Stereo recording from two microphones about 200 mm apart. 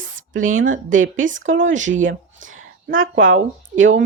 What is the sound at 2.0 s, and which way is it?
Speech, 75° right (ahead or behind).